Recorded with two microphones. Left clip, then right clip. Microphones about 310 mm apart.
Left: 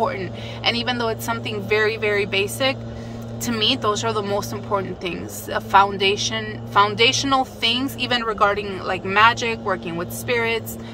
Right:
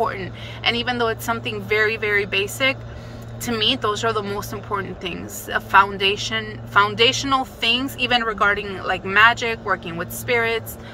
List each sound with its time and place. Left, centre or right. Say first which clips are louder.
0.0 s speech: even; centre